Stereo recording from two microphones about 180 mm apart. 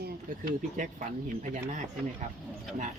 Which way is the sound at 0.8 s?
45° right (ahead or behind).